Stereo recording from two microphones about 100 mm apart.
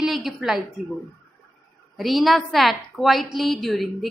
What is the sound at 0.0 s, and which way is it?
Speech, 5° right (ahead or behind).